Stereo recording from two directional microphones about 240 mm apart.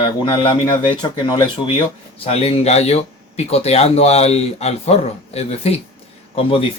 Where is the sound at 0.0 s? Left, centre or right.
Left.